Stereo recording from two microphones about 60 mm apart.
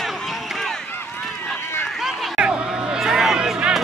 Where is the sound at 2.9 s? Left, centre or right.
Centre.